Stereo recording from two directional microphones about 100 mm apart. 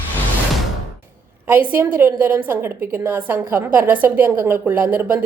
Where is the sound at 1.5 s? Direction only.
20° right (ahead or behind).